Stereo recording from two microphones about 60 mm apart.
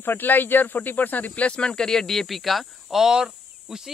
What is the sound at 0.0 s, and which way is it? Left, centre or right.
Speech, left.